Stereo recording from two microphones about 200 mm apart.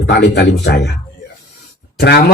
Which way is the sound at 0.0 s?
55° left (ahead or behind).